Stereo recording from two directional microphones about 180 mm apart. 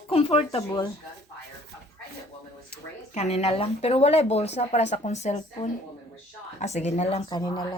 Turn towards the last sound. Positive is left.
turn(degrees=25)  # may be behind; listen again after turning